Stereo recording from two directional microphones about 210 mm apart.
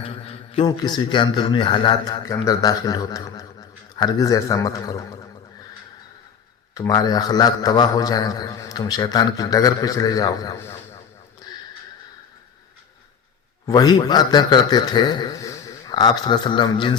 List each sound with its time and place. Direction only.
0.0 s a man's voice: 30° left (ahead or behind)
6.7 s a man's voice: 15° left (ahead or behind)
13.7 s a man's voice: 20° left (ahead or behind)